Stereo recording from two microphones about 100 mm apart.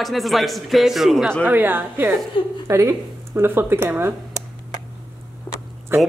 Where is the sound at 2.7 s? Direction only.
30° right (ahead or behind).